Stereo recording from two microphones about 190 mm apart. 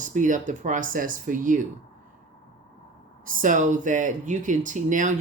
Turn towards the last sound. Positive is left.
turn(degrees=-45)  # may be behind; listen again after turning